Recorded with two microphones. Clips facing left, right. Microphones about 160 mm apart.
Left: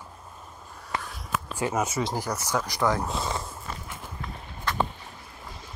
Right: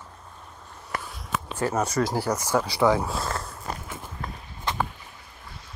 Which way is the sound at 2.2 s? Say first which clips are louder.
Right 4 dB; 10° right (ahead or behind).